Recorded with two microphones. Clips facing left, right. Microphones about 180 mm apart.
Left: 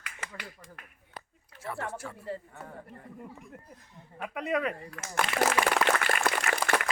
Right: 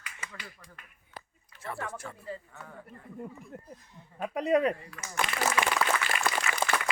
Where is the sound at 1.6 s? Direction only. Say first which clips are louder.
Left 1 dB; 5° left (ahead or behind).